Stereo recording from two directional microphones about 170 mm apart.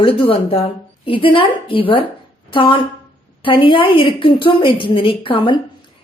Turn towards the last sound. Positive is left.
turn(degrees=30)  # may be behind; listen again after turning